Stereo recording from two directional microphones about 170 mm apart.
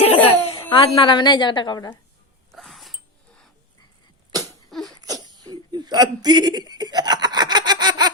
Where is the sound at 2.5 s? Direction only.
Centre (ahead or behind).